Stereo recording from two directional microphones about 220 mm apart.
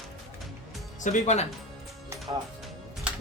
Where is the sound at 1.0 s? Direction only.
35° left (ahead or behind).